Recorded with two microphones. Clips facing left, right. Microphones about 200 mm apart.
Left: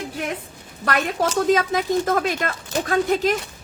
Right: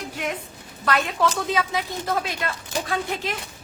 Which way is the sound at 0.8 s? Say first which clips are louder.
Left 1 dB; 45° left (ahead or behind).